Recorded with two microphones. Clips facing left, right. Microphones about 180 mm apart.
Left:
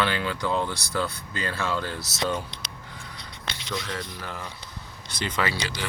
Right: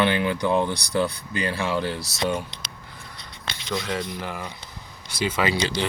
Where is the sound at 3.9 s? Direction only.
15° right (ahead or behind).